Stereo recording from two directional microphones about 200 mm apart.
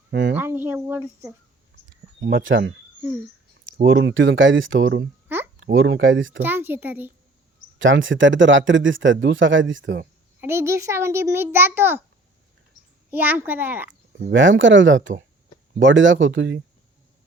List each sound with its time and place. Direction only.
0.1 s speech: 65° right (ahead or behind)
0.3 s a child's voice: 10° right (ahead or behind)
2.4 s speech: 70° right (ahead or behind)
3.8 s speech: 70° right (ahead or behind)
6.4 s a child's voice: 10° right (ahead or behind)
7.8 s speech: 70° right (ahead or behind)
10.4 s a child's voice: 15° right (ahead or behind)
13.1 s a child's voice: 10° right (ahead or behind)
14.2 s speech: 65° right (ahead or behind)